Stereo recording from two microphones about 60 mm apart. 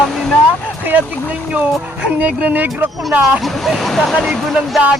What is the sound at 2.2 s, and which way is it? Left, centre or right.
Speech, right.